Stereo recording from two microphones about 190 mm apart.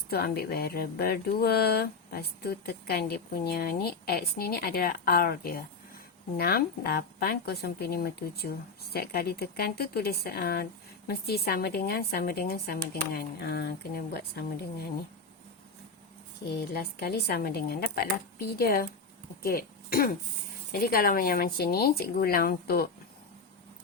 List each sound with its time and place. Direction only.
0.1 s speech: 55° left (ahead or behind)
16.6 s speech: 60° left (ahead or behind)